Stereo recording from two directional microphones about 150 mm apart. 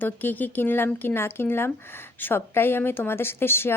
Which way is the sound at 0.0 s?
10° left (ahead or behind).